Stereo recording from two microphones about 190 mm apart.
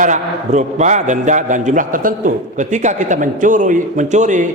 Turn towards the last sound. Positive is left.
turn(degrees=-40)  # may be behind; listen again after turning